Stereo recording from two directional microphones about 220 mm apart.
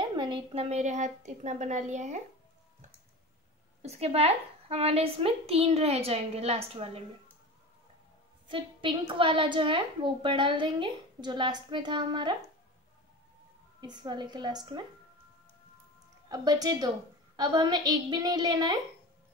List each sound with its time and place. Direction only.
0.1 s a woman's voice: 20° right (ahead or behind)
3.8 s a woman's voice: 30° right (ahead or behind)
8.5 s a woman's voice: 25° right (ahead or behind)
13.7 s a woman's voice: 20° right (ahead or behind)
16.3 s a woman's voice: 15° right (ahead or behind)